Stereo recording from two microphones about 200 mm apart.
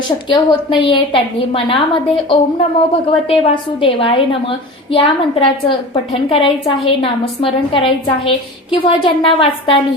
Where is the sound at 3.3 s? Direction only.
25° left (ahead or behind).